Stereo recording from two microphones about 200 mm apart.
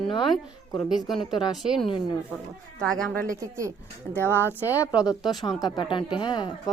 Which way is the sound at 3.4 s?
15° right (ahead or behind).